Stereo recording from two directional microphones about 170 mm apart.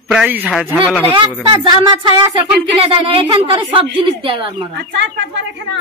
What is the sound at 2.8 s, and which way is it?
A woman's voice, 30° right (ahead or behind).